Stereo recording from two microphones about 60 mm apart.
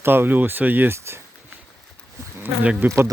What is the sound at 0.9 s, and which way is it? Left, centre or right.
Speech, right.